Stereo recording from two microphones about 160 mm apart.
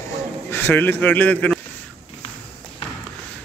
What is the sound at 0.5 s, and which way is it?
A man's voice, 10° left (ahead or behind).